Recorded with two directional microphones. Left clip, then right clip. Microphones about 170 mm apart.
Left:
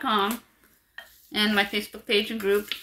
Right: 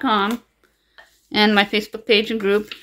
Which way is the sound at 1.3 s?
70° right (ahead or behind).